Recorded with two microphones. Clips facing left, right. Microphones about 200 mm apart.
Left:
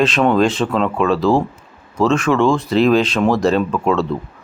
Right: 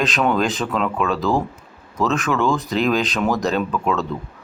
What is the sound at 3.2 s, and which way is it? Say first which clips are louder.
Speech: left 5 dB; 30° left (ahead or behind).